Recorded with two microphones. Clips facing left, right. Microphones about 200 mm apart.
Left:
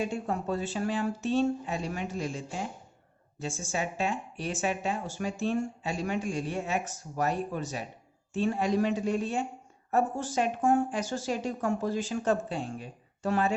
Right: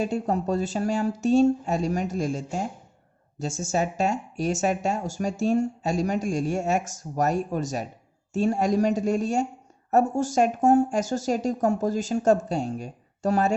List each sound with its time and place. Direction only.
0.0 s speech: 40° right (ahead or behind)